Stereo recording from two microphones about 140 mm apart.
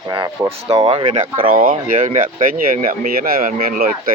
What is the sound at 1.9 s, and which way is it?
Speech, 65° right (ahead or behind).